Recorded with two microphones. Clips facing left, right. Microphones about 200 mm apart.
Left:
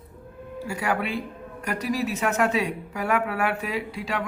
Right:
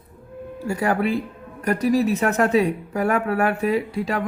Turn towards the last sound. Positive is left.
turn(degrees=-45)  # may be behind; listen again after turning